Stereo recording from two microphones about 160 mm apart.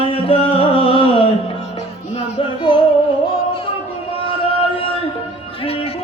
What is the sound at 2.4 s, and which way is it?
Music, 30° left (ahead or behind).